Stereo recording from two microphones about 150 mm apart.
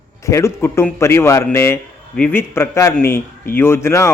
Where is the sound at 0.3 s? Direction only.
20° left (ahead or behind).